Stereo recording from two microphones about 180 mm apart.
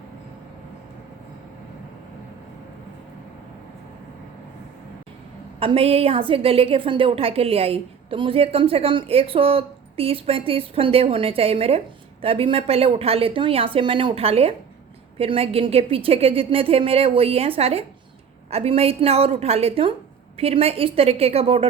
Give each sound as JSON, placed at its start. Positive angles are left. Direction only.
{"t": 5.5, "sound": "a woman's voice", "side_deg": -30}